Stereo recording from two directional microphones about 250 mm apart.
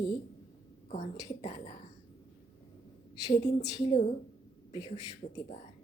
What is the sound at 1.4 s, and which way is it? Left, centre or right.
Speech, left.